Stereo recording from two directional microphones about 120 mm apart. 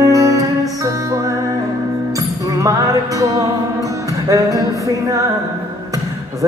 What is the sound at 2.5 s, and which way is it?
Music, 25° right (ahead or behind).